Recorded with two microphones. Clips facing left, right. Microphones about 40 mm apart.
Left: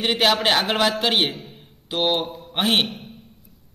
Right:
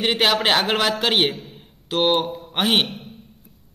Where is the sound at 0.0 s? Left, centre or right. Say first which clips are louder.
Even; centre.